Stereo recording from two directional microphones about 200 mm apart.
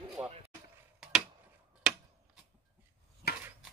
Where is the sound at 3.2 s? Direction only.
50° left (ahead or behind).